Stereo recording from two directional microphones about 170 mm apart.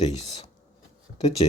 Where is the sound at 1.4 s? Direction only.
35° left (ahead or behind).